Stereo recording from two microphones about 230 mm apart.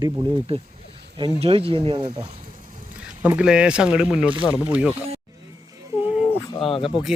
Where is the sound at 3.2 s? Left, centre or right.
Centre.